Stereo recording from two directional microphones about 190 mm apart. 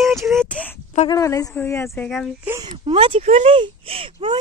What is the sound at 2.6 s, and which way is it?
Speech, 25° right (ahead or behind).